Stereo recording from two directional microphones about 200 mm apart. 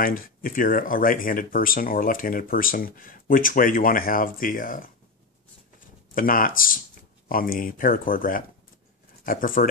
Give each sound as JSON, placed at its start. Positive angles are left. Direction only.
{"t": 0.0, "sound": "speech", "side_deg": 45}
{"t": 6.1, "sound": "speech", "side_deg": 45}